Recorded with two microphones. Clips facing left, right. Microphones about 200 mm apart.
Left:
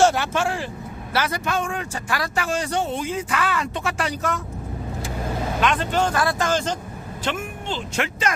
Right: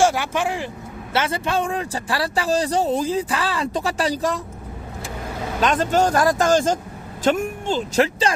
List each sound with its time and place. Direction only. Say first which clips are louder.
0.0 s speech: even; 10° right (ahead or behind); by 4.4 s 35° right (ahead or behind)
5.6 s speech: right 4 dB; 40° right (ahead or behind)